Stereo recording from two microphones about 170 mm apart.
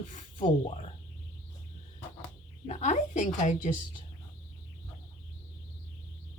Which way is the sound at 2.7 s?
45° left (ahead or behind).